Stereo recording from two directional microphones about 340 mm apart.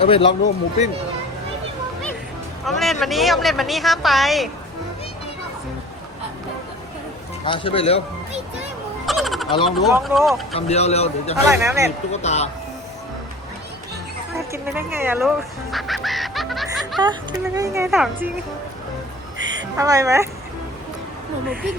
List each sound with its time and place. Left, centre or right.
0.0 s a man's voice: centre
2.6 s speech: centre
7.4 s a man's voice: centre
9.0 s frog: centre
9.6 s speech: centre
10.5 s a man's voice: centre
11.4 s speech: centre
12.1 s speech: centre
14.3 s speech: centre
15.7 s music: centre
17.0 s speech: centre
19.7 s speech: centre